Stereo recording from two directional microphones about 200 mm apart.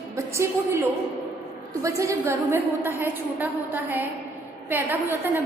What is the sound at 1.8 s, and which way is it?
A woman's voice, 15° right (ahead or behind).